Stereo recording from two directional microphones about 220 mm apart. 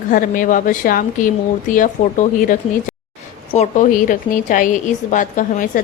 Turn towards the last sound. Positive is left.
turn(degrees=35)  # may be behind; listen again after turning